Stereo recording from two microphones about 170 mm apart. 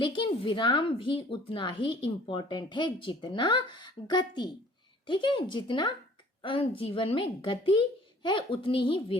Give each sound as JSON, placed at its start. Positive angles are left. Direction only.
{"t": 0.0, "sound": "a woman's voice", "side_deg": 30}